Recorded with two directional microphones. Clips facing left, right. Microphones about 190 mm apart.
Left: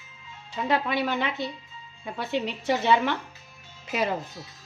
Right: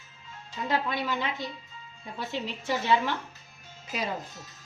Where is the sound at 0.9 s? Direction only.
70° left (ahead or behind).